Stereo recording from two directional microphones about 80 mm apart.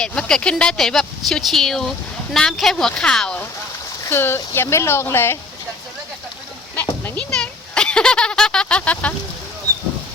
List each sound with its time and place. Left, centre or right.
0.0 s speech: centre
4.1 s a woman's voice: left
7.2 s speech: centre